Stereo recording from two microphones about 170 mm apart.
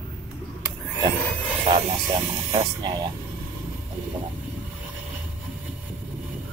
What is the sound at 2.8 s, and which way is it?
Speech, 25° right (ahead or behind).